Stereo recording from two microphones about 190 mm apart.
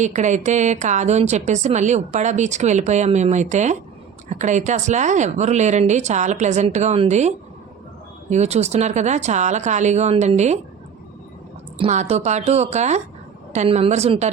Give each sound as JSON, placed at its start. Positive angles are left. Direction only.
{"t": 0.0, "sound": "a woman's voice", "side_deg": -40}
{"t": 11.8, "sound": "a woman's voice", "side_deg": -35}